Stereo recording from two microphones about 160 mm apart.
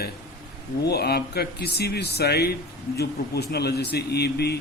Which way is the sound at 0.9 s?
85° left.